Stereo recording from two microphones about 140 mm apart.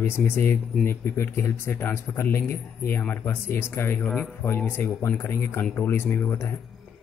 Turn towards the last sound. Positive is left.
turn(degrees=15)  # may be behind; listen again after turning